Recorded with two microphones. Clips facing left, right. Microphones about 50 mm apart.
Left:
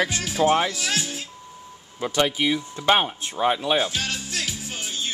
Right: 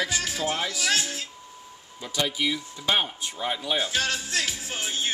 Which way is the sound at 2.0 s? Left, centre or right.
Left.